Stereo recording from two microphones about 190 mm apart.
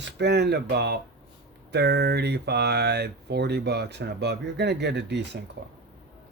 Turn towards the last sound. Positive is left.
turn(degrees=-65)  # may be behind; listen again after turning